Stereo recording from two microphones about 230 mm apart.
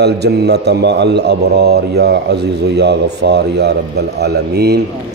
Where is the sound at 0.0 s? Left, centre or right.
Right.